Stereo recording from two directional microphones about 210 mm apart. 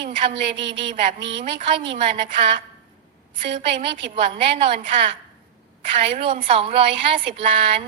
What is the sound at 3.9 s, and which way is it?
A woman's voice, 25° right (ahead or behind).